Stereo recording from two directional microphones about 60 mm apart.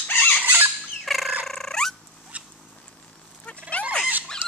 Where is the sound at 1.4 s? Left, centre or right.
Centre.